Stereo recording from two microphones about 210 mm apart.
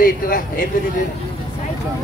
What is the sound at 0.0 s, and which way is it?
Speech, 40° left (ahead or behind).